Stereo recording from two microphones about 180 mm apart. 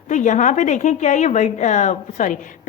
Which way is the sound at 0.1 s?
45° left (ahead or behind).